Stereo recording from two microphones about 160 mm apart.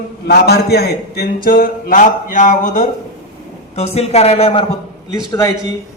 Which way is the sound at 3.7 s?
40° left (ahead or behind).